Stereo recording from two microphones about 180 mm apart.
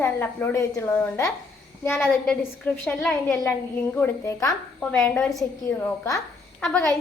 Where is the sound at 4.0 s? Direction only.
20° left (ahead or behind).